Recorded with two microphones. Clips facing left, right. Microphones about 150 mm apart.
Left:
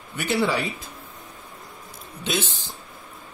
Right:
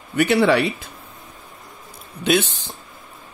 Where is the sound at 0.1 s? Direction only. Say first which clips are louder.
Right 7 dB; 65° right (ahead or behind).